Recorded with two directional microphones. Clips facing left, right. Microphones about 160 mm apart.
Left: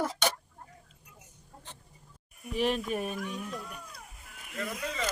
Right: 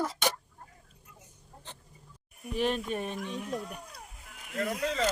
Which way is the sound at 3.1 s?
25° right (ahead or behind).